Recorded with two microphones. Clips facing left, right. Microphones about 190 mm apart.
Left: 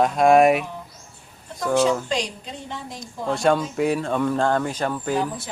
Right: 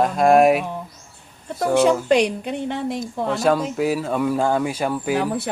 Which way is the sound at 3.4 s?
Centre (ahead or behind).